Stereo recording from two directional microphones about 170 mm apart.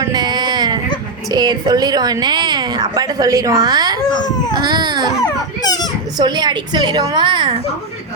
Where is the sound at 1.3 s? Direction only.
25° right (ahead or behind).